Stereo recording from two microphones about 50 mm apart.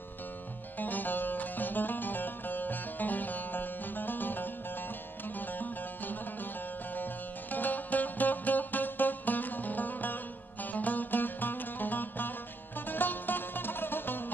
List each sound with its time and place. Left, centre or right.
0.7 s music: left
5.5 s music: left
7.5 s music: left